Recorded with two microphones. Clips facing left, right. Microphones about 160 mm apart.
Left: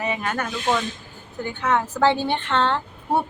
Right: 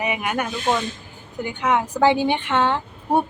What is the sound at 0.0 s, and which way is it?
Speech, 15° right (ahead or behind).